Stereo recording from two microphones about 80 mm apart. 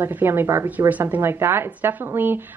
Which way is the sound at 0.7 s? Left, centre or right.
Right.